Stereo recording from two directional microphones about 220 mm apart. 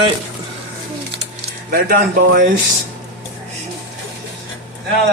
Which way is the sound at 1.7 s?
40° right (ahead or behind).